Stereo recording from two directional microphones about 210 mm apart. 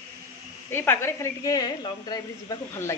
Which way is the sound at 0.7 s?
10° left (ahead or behind).